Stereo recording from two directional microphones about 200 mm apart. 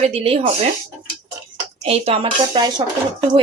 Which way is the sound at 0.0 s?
30° right (ahead or behind).